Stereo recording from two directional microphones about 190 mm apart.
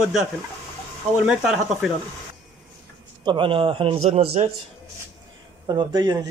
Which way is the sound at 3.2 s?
25° right (ahead or behind).